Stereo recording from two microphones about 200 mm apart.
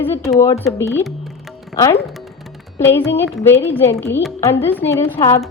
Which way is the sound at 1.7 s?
15° left (ahead or behind).